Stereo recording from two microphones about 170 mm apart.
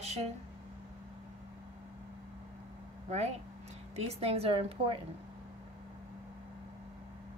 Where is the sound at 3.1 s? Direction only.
40° right (ahead or behind).